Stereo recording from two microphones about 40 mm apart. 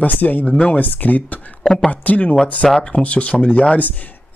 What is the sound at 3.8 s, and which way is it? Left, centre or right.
Speech, left.